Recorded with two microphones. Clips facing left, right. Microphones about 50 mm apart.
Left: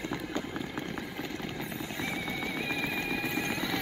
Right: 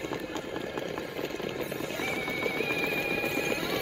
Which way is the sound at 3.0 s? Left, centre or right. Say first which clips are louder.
Right 3 dB; right.